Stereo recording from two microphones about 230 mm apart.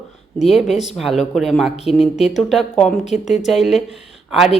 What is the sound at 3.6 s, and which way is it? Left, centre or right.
Speech, left.